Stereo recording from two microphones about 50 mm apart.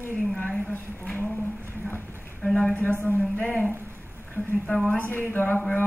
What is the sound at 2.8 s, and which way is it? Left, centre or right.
Speech, left.